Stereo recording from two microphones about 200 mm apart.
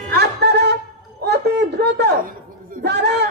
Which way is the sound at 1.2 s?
55° right (ahead or behind).